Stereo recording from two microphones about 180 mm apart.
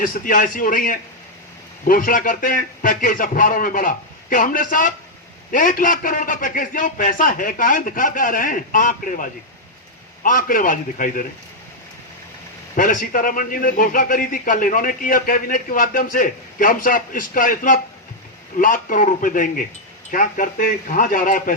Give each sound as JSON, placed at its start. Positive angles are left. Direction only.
{"t": 0.0, "sound": "a man's voice", "side_deg": 50}
{"t": 12.7, "sound": "a man's voice", "side_deg": 50}